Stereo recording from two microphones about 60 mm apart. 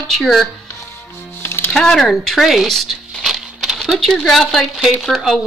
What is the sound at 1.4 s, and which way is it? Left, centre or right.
Music, left.